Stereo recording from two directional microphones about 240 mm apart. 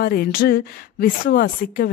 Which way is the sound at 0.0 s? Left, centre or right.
Left.